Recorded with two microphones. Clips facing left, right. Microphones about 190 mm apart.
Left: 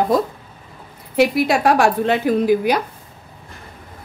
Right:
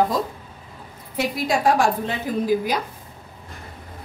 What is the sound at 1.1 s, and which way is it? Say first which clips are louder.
A woman's voice: left 7 dB; 70° left (ahead or behind).